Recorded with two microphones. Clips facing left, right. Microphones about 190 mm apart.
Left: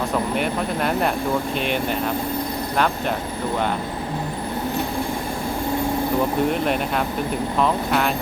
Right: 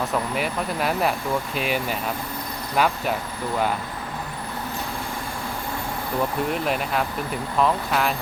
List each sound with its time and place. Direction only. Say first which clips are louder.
0.3 s speech: left 3 dB; 5° right (ahead or behind)
6.5 s speech: left 3 dB; centre (ahead or behind)